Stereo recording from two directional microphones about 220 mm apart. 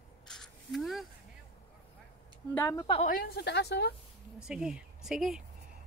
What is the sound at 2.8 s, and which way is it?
Speech, 25° left (ahead or behind).